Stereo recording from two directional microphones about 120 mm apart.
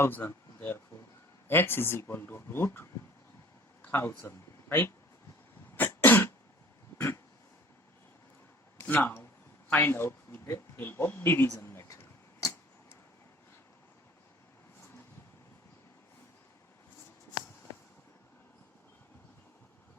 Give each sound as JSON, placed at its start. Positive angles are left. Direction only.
{"t": 0.0, "sound": "speech", "side_deg": 15}
{"t": 3.8, "sound": "speech", "side_deg": 15}
{"t": 5.7, "sound": "cough", "side_deg": 15}
{"t": 8.8, "sound": "speech", "side_deg": 20}
{"t": 9.6, "sound": "a sound", "side_deg": 20}
{"t": 17.7, "sound": "vehicle", "side_deg": 20}